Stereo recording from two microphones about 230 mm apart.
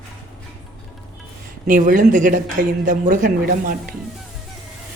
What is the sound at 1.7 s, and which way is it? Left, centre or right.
Speech, right.